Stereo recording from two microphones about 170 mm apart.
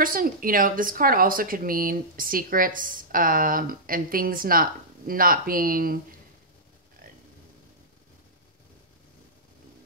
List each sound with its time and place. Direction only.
0.0 s speech: 55° right (ahead or behind)